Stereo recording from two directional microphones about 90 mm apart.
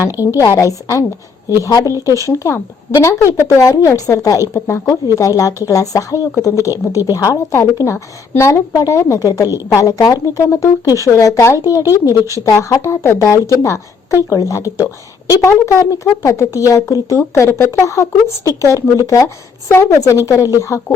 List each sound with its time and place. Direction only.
0.3 s speech: 35° left (ahead or behind)
4.5 s speech: 25° left (ahead or behind)
4.9 s speech: 40° left (ahead or behind)